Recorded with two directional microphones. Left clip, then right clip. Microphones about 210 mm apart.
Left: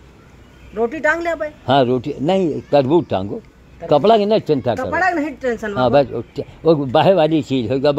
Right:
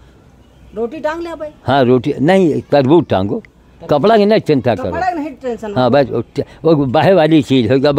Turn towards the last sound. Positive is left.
turn(degrees=-40)  # may be behind; listen again after turning